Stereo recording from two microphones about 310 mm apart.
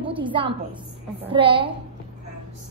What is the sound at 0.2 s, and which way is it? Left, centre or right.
A woman's voice, centre.